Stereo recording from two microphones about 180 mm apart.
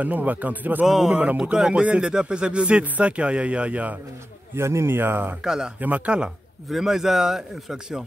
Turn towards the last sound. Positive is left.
turn(degrees=-5)  # may be behind; listen again after turning